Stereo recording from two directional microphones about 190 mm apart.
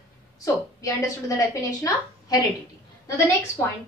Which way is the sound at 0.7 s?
15° left (ahead or behind).